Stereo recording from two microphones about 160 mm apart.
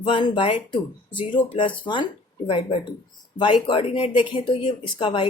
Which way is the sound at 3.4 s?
30° left (ahead or behind).